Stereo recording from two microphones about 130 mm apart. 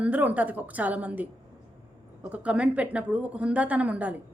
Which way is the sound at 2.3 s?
10° right (ahead or behind).